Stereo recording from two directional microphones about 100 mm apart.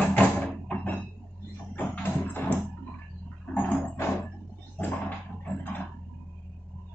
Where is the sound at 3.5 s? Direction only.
15° left (ahead or behind).